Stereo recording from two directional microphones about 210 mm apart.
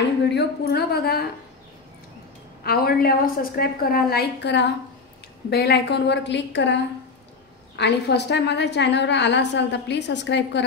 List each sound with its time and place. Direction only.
0.3 s a woman's voice: 50° left (ahead or behind)
2.6 s a woman's voice: 45° left (ahead or behind)